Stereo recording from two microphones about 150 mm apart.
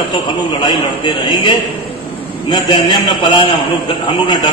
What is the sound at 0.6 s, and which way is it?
A man's voice, 35° left (ahead or behind).